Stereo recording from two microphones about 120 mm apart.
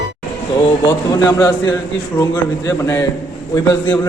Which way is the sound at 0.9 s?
35° left (ahead or behind).